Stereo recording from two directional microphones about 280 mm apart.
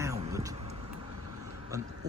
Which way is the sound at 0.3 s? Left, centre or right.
Centre.